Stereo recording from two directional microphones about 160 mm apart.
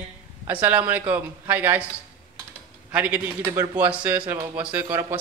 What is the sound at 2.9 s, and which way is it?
A man's voice, 10° right (ahead or behind).